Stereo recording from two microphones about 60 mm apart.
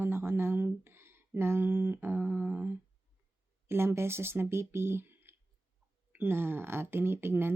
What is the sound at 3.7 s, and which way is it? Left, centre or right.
Speech, right.